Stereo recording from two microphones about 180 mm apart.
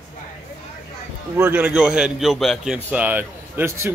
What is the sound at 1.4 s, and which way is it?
A man's voice, 10° right (ahead or behind).